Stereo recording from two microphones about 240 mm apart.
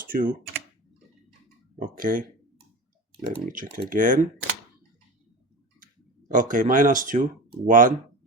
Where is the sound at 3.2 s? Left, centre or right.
Right.